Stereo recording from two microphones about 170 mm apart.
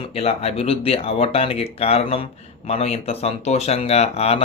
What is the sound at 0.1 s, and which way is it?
Speech, 35° left (ahead or behind).